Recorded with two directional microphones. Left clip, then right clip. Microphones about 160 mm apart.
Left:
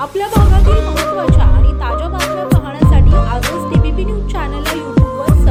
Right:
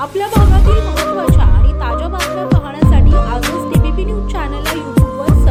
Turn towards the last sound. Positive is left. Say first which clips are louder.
# even
turn(degrees=0)  # may be behind; listen again after turning